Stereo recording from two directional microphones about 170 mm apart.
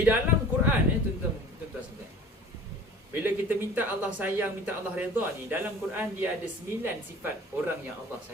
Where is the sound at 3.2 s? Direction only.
10° right (ahead or behind).